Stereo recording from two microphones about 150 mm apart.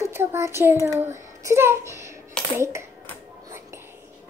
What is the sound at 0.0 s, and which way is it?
A child's voice, 15° right (ahead or behind).